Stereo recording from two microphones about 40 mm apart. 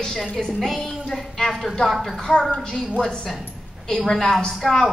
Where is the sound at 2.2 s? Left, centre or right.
Centre.